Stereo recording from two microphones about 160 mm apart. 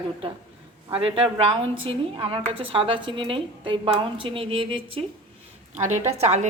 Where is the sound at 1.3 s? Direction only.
35° right (ahead or behind).